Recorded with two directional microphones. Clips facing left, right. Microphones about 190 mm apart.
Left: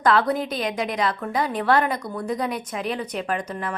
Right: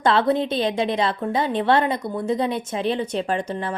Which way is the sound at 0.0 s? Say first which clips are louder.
Right 2 dB; 25° right (ahead or behind).